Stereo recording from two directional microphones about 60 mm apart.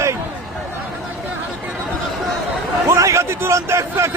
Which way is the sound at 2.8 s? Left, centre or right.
Right.